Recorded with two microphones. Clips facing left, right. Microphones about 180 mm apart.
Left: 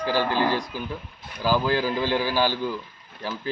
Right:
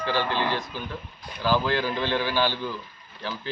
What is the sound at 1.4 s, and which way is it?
A man's voice, 10° left (ahead or behind).